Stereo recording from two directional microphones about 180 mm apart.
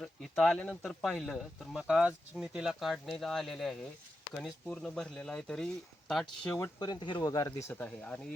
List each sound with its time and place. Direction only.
0.0 s speech: centre (ahead or behind)
6.5 s speech: 20° left (ahead or behind)
7.7 s speech: 10° left (ahead or behind)